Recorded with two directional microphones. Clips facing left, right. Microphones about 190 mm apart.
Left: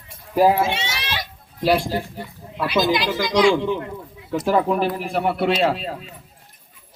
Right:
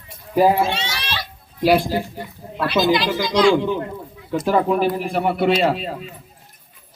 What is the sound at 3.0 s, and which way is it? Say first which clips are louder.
Speech: right 1 dB; centre (ahead or behind).